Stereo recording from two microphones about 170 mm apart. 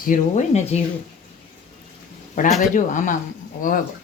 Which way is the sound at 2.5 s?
Centre (ahead or behind).